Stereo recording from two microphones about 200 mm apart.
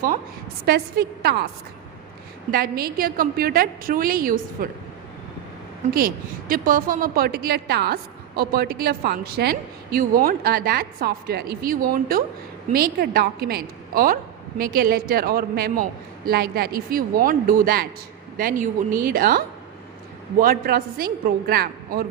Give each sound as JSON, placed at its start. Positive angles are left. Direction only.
{"t": 0.6, "sound": "a woman's voice", "side_deg": -50}
{"t": 2.5, "sound": "a woman's voice", "side_deg": -50}
{"t": 5.9, "sound": "a woman's voice", "side_deg": -45}
{"t": 19.0, "sound": "a woman's voice", "side_deg": -45}